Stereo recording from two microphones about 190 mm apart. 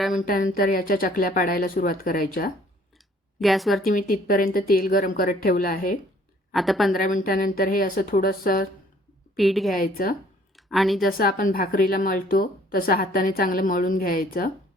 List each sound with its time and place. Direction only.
0.1 s a woman's voice: 45° left (ahead or behind)
3.4 s speech: centre (ahead or behind)
3.8 s a woman's voice: 45° left (ahead or behind)
6.5 s speech: centre (ahead or behind)
6.9 s a woman's voice: 45° left (ahead or behind)
9.3 s a woman's voice: centre (ahead or behind)
9.7 s a woman's voice: 50° left (ahead or behind)
10.7 s speech: centre (ahead or behind)
11.2 s a woman's voice: 50° left (ahead or behind)